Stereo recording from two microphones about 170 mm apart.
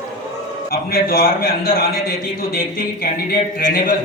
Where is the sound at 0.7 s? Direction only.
60° left (ahead or behind).